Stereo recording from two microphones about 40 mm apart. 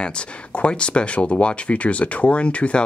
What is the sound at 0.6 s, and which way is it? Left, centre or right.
Speech, left.